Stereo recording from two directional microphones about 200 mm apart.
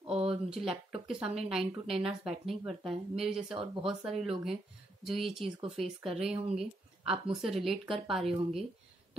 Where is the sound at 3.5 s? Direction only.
25° right (ahead or behind).